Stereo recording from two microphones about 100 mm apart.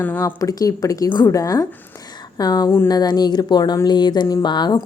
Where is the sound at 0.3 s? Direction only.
35° left (ahead or behind).